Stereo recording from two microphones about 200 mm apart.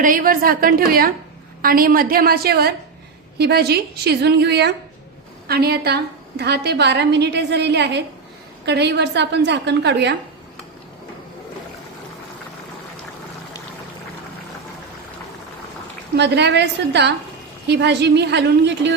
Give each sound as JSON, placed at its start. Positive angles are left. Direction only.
{"t": 0.0, "sound": "a woman's voice", "side_deg": -45}
{"t": 16.1, "sound": "a woman's voice", "side_deg": -55}